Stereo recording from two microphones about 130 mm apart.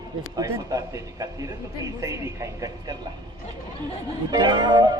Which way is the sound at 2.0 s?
25° right (ahead or behind).